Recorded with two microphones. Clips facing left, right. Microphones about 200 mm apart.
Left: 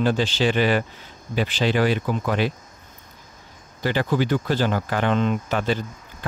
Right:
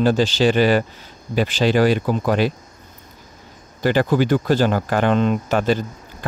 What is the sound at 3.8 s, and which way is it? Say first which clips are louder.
Speech: right 5 dB; 45° right (ahead or behind).